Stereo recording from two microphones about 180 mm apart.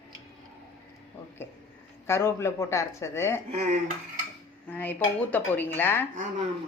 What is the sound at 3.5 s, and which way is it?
Speech, 35° right (ahead or behind).